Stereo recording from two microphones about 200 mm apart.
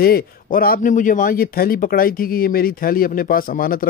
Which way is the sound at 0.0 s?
50° left (ahead or behind).